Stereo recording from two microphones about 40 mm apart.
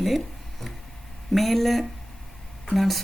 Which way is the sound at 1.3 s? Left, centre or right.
Centre.